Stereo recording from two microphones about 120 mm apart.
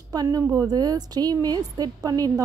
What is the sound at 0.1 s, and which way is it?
A woman's voice, 30° right (ahead or behind).